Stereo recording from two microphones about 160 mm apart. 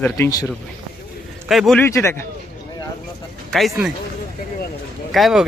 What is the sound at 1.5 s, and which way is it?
Speech, centre (ahead or behind).